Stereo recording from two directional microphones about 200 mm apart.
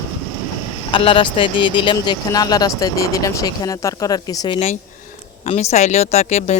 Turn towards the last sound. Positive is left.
turn(degrees=35)  # may be behind; listen again after turning